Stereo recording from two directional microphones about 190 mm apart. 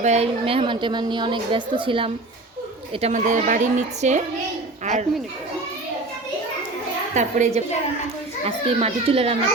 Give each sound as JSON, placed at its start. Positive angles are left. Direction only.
{"t": 0.0, "sound": "a woman's voice", "side_deg": -35}
{"t": 3.0, "sound": "a woman's voice", "side_deg": -40}
{"t": 7.1, "sound": "a woman's voice", "side_deg": -40}